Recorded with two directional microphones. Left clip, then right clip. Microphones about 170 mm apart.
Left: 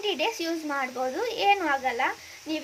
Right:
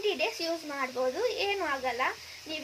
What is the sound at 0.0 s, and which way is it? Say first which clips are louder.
Speech: left 2 dB; 70° left (ahead or behind).